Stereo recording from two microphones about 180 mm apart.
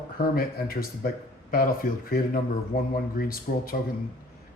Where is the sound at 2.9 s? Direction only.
55° left (ahead or behind).